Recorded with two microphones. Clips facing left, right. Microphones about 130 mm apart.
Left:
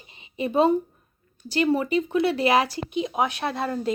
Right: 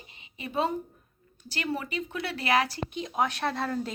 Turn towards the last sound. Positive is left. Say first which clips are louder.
# left 4 dB
turn(degrees=10)  # may be behind; listen again after turning